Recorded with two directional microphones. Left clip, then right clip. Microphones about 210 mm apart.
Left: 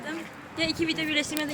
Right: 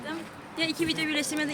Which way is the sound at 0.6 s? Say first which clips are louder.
Left 1 dB; 20° right (ahead or behind).